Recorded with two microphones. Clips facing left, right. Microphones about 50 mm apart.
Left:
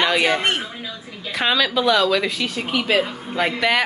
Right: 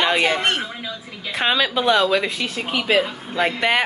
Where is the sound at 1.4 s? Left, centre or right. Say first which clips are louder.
Left 1 dB; right.